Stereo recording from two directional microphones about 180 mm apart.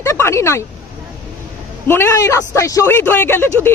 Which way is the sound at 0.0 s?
15° left (ahead or behind).